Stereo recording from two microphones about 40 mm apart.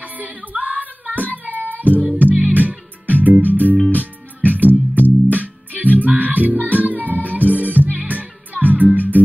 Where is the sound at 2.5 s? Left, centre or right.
Right.